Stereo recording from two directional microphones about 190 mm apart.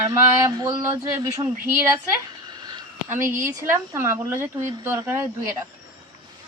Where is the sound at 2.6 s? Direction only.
20° right (ahead or behind).